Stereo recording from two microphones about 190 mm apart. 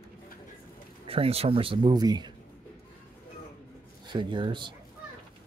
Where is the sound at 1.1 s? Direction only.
30° right (ahead or behind).